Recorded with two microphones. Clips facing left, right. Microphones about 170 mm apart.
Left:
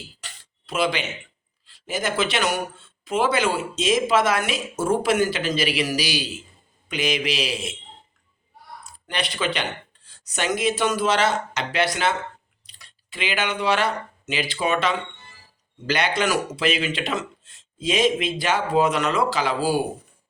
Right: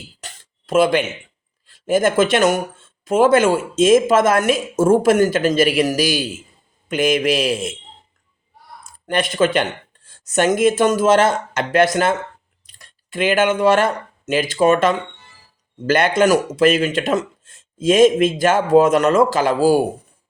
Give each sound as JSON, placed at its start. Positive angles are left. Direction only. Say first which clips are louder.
{"t": 0.2, "sound": "a sound", "louder": "right 5 dB", "side_deg": -45}
{"t": 1.6, "sound": "speech", "louder": "right 11 dB", "side_deg": -50}
{"t": 8.8, "sound": "speech", "louder": "right 9 dB", "side_deg": -50}